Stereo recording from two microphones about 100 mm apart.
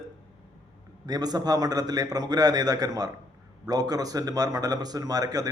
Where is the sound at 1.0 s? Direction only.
40° right (ahead or behind).